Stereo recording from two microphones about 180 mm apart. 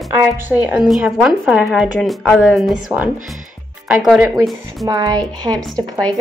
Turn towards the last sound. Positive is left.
turn(degrees=5)  # may be behind; listen again after turning